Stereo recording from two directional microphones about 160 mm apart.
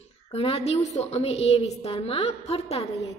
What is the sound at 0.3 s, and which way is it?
A woman's voice, 40° left (ahead or behind).